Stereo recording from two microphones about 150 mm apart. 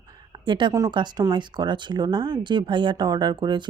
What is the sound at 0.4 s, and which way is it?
Speech, 30° right (ahead or behind).